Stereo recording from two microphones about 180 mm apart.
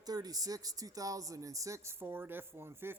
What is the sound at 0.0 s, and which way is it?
Speech, 20° right (ahead or behind).